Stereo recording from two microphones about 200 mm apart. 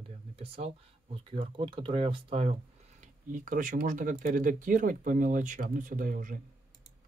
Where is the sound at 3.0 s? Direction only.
40° right (ahead or behind).